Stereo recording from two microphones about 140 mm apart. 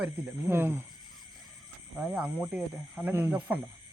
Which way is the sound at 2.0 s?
10° right (ahead or behind).